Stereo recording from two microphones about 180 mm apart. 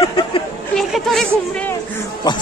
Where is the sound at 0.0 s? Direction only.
30° left (ahead or behind).